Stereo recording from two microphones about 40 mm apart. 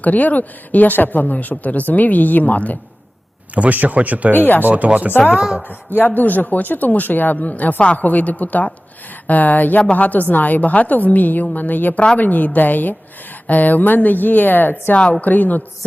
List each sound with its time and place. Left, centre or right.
0.0 s speech: left
3.5 s speech: right
4.4 s speech: left
4.7 s speech: right
5.6 s speech: left
6.1 s speech: left